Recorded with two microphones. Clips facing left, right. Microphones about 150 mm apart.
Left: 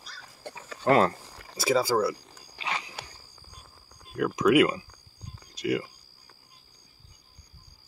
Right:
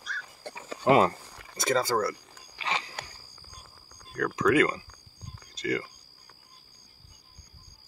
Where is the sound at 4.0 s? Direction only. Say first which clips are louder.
Left 2 dB; 10° left (ahead or behind).